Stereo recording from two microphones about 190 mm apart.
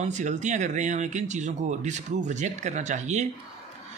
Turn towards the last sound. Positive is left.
turn(degrees=-40)  # may be behind; listen again after turning